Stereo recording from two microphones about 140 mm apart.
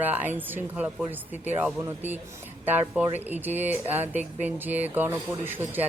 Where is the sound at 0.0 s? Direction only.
10° right (ahead or behind).